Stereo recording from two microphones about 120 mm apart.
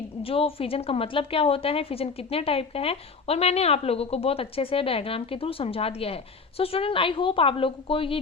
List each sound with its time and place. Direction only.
0.2 s a woman's voice: 50° left (ahead or behind)